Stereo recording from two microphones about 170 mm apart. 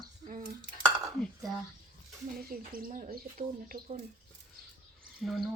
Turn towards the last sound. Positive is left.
turn(degrees=0)  # may be behind; listen again after turning